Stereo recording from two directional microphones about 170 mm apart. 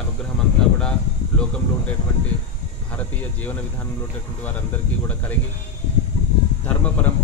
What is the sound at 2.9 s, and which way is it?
Speech, 10° left (ahead or behind).